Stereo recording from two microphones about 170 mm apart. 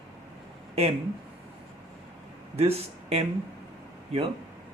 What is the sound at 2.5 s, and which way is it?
Speech, 40° right (ahead or behind).